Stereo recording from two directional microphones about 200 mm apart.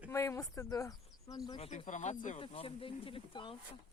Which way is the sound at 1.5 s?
30° left (ahead or behind).